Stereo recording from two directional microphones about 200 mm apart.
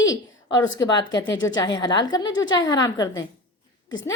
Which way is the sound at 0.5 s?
15° left (ahead or behind).